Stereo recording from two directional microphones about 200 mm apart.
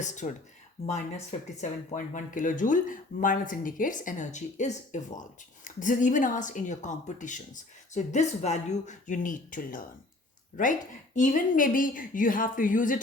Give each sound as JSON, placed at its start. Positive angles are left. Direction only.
{"t": 0.0, "sound": "a woman's voice", "side_deg": 35}